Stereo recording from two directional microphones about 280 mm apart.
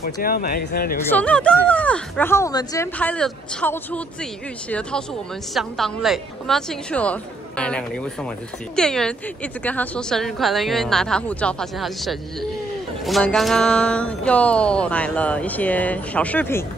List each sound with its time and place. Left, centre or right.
0.0 s speech: left
1.0 s speech: centre